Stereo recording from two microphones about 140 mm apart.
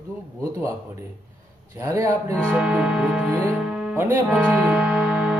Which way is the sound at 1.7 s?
20° right (ahead or behind).